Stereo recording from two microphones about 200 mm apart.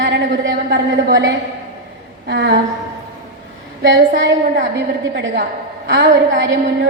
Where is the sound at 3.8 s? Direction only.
60° right (ahead or behind).